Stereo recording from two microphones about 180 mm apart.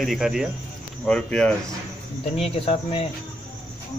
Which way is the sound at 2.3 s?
35° left (ahead or behind).